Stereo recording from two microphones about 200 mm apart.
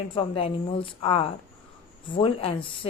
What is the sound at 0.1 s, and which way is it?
A woman's voice, 25° left (ahead or behind).